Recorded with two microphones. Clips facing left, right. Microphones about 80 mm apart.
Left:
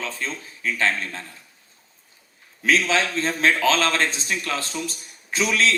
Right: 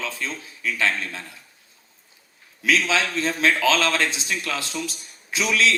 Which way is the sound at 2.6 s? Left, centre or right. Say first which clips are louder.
Left 1 dB; left.